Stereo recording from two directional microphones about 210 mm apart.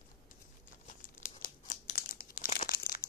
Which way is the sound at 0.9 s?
40° left (ahead or behind).